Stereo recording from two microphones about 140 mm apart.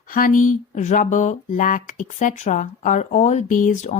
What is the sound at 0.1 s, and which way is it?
Speech, 75° left (ahead or behind).